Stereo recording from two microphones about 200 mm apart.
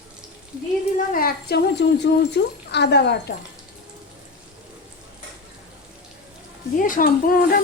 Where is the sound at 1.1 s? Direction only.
50° left (ahead or behind).